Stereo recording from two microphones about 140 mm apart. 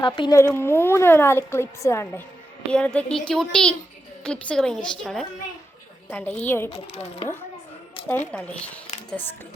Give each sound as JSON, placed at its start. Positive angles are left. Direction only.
{"t": 0.0, "sound": "speech", "side_deg": 30}
{"t": 0.3, "sound": "a woman's voice", "side_deg": 15}
{"t": 2.7, "sound": "a woman's voice", "side_deg": 10}
{"t": 6.7, "sound": "speech", "side_deg": 45}
{"t": 8.0, "sound": "a sound", "side_deg": 40}
{"t": 8.3, "sound": "a woman's voice", "side_deg": 10}